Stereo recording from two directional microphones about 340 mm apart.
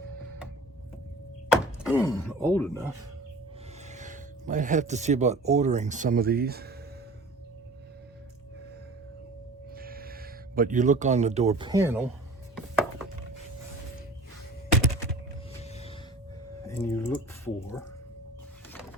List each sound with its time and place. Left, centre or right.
1.5 s door: centre
2.0 s speech: centre
3.9 s speech: right
9.7 s speech: right; by 12.1 s centre
15.6 s gasp: centre
16.6 s a sound: centre